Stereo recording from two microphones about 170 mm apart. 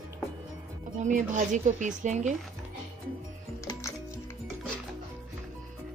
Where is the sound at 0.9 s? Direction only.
45° right (ahead or behind).